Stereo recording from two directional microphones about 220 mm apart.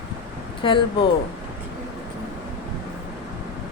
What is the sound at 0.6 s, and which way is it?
Speech, 20° left (ahead or behind).